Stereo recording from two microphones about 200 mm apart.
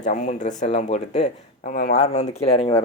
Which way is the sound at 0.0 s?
35° left (ahead or behind).